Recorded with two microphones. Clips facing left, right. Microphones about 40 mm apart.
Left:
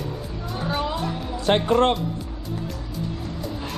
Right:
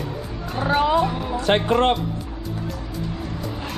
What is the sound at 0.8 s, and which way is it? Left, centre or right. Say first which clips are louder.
Speech: right 8 dB; right.